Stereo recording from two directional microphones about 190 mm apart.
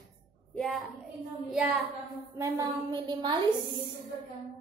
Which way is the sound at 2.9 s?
25° right (ahead or behind).